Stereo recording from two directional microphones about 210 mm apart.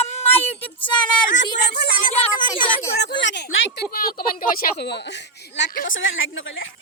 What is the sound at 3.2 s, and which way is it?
Speech, 55° left (ahead or behind).